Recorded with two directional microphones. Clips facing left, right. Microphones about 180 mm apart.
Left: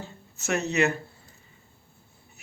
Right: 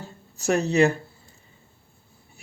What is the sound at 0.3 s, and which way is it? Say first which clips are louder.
Speech: right 5 dB; 35° right (ahead or behind).